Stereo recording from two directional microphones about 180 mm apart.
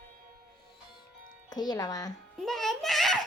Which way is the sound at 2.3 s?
Centre (ahead or behind).